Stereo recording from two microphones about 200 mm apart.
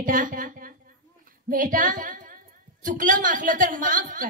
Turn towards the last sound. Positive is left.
turn(degrees=-40)  # may be behind; listen again after turning